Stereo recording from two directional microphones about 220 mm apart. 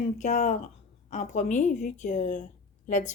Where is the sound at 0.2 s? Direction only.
35° left (ahead or behind).